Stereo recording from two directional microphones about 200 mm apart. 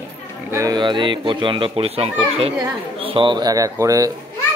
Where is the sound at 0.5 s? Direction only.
20° right (ahead or behind).